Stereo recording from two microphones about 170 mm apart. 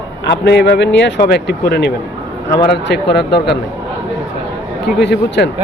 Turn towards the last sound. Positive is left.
turn(degrees=90)